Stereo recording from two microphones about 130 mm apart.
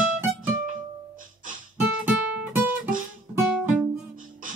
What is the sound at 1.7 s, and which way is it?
Guitar, 15° right (ahead or behind).